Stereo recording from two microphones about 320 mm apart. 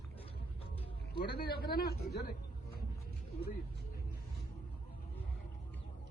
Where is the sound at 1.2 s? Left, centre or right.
Left.